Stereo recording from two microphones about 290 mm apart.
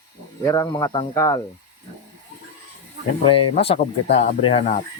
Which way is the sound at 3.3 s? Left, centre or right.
Centre.